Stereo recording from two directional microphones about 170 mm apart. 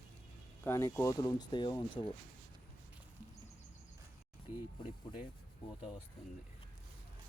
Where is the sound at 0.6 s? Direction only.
15° left (ahead or behind).